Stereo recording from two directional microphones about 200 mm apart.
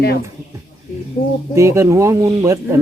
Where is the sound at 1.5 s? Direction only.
15° right (ahead or behind).